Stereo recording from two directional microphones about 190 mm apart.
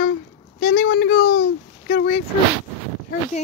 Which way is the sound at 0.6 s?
50° left (ahead or behind).